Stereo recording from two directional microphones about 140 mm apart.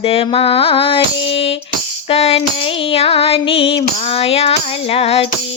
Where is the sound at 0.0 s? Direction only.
45° left (ahead or behind).